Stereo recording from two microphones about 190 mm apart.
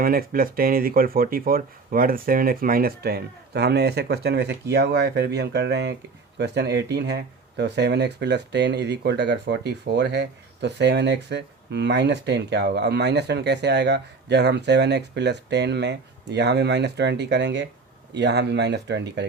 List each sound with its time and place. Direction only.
0.0 s speech: 50° right (ahead or behind)